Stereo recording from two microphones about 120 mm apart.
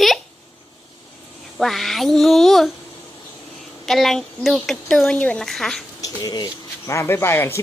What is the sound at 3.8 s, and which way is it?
A woman's voice, centre (ahead or behind).